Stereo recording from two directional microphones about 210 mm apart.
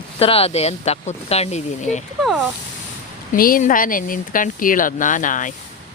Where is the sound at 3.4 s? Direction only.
40° left (ahead or behind).